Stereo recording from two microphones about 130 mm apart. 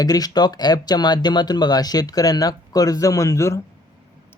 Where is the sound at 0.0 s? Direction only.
30° left (ahead or behind).